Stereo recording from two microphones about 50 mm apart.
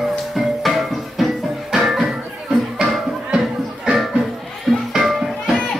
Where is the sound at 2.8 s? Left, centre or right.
Centre.